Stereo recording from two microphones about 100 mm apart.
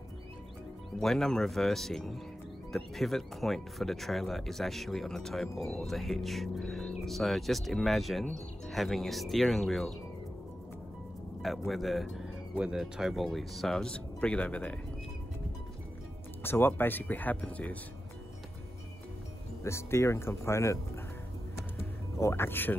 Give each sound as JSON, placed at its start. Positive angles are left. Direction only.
{"t": 1.0, "sound": "speech", "side_deg": 5}
{"t": 11.4, "sound": "speech", "side_deg": 0}
{"t": 16.4, "sound": "speech", "side_deg": 20}
{"t": 19.6, "sound": "speech", "side_deg": 25}
{"t": 22.2, "sound": "speech", "side_deg": 25}